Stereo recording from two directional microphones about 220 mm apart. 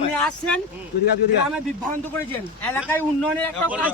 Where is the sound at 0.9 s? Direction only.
50° left (ahead or behind).